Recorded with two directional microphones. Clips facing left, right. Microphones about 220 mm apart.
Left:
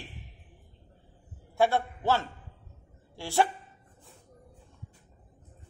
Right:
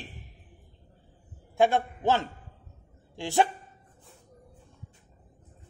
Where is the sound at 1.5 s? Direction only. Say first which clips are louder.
Right 2 dB; 15° right (ahead or behind).